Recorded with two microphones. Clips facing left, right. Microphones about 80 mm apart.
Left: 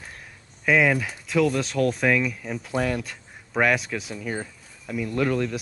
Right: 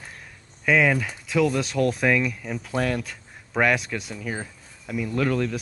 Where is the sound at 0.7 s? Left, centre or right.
Centre.